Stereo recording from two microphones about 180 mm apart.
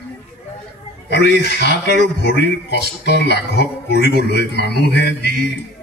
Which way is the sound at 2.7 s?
70° left (ahead or behind).